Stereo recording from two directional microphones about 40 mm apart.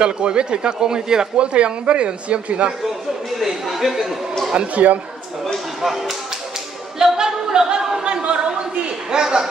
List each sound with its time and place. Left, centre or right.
0.0 s speech: right
1.5 s speech: right
3.3 s speech: centre
4.7 s speech: right
5.8 s speech: centre
7.0 s music: centre
8.0 s a sound: right
9.1 s speech: centre